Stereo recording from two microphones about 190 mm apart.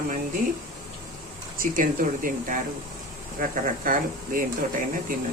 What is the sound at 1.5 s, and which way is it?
Speech, 45° right (ahead or behind).